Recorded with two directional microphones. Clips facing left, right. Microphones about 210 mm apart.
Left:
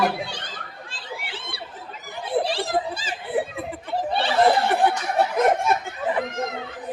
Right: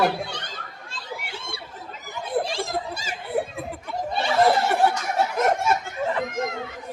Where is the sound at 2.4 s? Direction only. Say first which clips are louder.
Left 4 dB; 35° left (ahead or behind).